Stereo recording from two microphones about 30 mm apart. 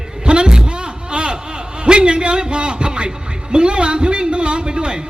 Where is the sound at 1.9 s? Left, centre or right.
Right.